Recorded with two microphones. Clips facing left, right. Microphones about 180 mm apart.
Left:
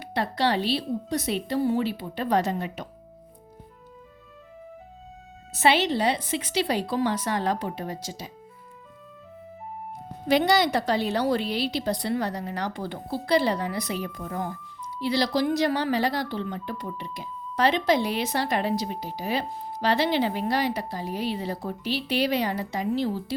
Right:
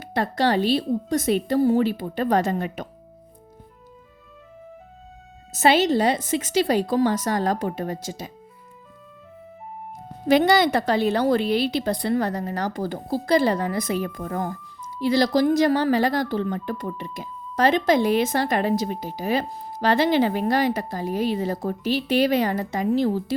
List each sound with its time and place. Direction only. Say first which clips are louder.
0.0 s a woman's voice: right 3 dB; 45° right (ahead or behind)
5.5 s a woman's voice: right 4 dB; 45° right (ahead or behind)
10.2 s a woman's voice: right 4 dB; 50° right (ahead or behind)